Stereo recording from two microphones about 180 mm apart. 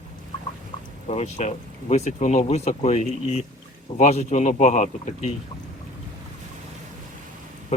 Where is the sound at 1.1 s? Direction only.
40° left (ahead or behind).